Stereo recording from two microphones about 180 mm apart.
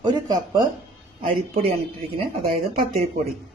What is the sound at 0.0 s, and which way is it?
Speech, 20° right (ahead or behind).